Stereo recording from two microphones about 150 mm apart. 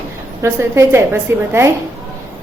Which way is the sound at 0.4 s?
15° right (ahead or behind).